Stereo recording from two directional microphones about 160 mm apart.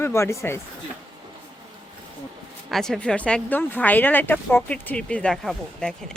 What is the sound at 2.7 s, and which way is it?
Speech, centre (ahead or behind).